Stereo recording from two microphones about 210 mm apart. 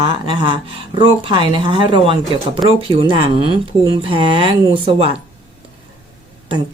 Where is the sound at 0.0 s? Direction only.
25° right (ahead or behind).